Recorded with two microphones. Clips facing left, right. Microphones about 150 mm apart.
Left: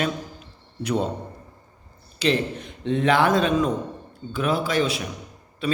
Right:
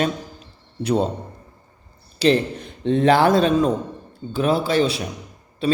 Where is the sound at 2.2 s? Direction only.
35° right (ahead or behind).